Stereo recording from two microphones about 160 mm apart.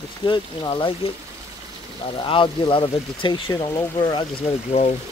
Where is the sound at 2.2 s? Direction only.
30° left (ahead or behind).